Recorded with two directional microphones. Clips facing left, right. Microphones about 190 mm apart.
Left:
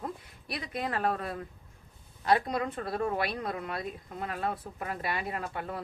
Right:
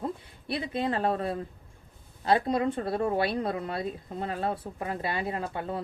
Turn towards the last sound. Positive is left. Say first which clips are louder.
# right 3 dB
turn(degrees=-25)  # may be behind; listen again after turning